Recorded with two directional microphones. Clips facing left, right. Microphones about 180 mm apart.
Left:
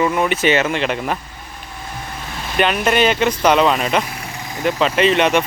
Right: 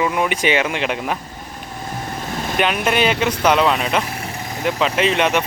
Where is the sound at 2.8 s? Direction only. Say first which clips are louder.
Left 3 dB; 5° right (ahead or behind).